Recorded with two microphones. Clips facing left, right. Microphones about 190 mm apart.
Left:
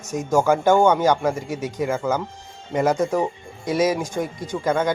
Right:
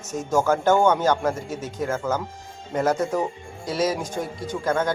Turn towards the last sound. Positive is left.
turn(degrees=10)  # may be behind; listen again after turning